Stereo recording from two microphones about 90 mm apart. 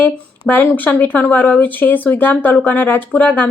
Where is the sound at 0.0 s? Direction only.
20° left (ahead or behind).